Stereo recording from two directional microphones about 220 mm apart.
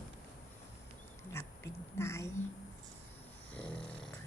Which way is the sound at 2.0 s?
10° left (ahead or behind).